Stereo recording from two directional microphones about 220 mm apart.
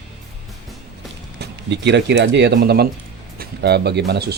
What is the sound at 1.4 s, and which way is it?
Speech, 50° right (ahead or behind).